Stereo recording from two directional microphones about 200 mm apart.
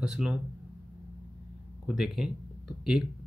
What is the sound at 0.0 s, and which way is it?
Speech, 5° right (ahead or behind).